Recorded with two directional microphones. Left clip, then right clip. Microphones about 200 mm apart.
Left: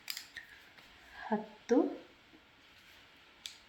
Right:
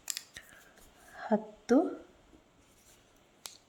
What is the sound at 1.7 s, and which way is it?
Speech, 65° right (ahead or behind).